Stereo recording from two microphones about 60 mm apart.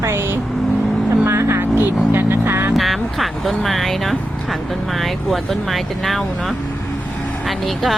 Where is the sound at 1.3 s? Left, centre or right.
Right.